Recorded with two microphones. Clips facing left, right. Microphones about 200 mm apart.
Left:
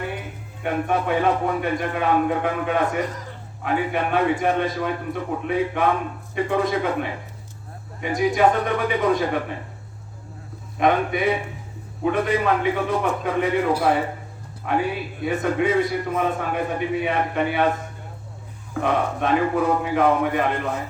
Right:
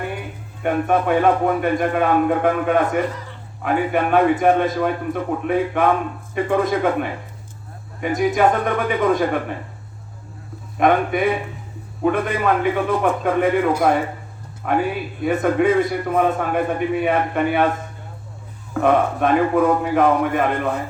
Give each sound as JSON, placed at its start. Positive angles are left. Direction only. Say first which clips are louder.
{"t": 0.6, "sound": "a man's voice", "louder": "right 4 dB", "side_deg": -50}
{"t": 10.8, "sound": "a man's voice", "louder": "right 3 dB", "side_deg": -50}
{"t": 14.6, "sound": "a man's voice", "louder": "right 3 dB", "side_deg": -50}
{"t": 18.7, "sound": "a man's voice", "louder": "right 5 dB", "side_deg": -50}